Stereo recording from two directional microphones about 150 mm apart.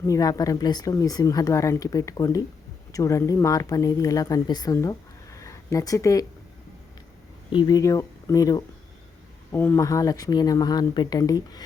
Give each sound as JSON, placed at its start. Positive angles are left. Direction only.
{"t": 0.0, "sound": "speech", "side_deg": 25}
{"t": 7.5, "sound": "speech", "side_deg": 30}